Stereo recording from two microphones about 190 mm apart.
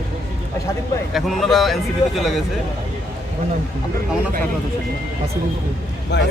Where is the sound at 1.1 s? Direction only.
Centre (ahead or behind).